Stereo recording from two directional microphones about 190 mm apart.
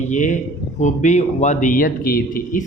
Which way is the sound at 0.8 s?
40° left (ahead or behind).